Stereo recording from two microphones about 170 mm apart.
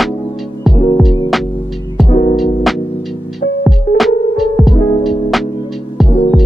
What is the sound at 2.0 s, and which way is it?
Music, 40° left (ahead or behind).